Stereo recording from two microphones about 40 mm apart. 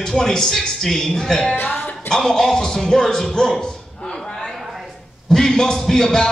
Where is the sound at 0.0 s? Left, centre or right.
Centre.